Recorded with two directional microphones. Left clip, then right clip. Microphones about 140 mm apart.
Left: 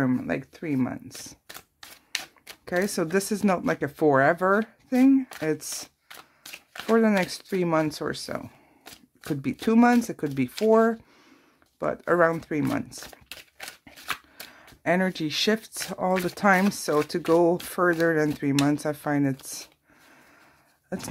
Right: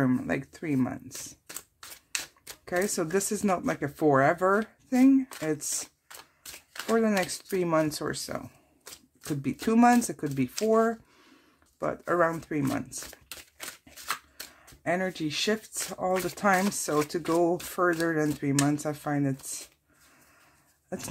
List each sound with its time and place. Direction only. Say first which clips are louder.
0.0 s speech: left 1 dB; 20° left (ahead or behind)
2.6 s speech: left 2 dB; 30° left (ahead or behind)
6.9 s speech: left 4 dB; 30° left (ahead or behind)
10.2 s speech: left 4 dB; 35° left (ahead or behind)
12.9 s crumpling: left 1 dB; centre (ahead or behind)
14.5 s speech: left 5 dB; 35° left (ahead or behind)
20.9 s speech: left 3 dB; 25° left (ahead or behind)